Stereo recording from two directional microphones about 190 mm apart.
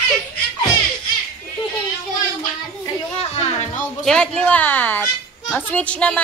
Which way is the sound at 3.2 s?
35° left (ahead or behind).